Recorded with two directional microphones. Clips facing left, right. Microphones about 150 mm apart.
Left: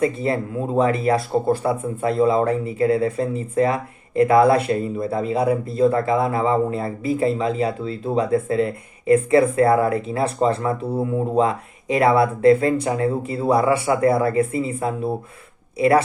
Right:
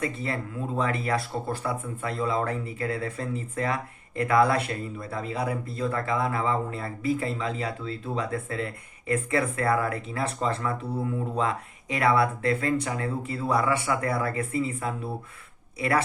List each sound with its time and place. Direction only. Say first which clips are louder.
0.0 s speech: left 9 dB; 25° left (ahead or behind)